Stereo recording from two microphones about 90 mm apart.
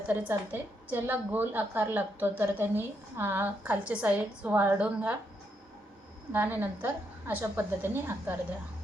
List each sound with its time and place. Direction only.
0.1 s a woman's voice: 20° right (ahead or behind)
6.3 s a woman's voice: 25° right (ahead or behind)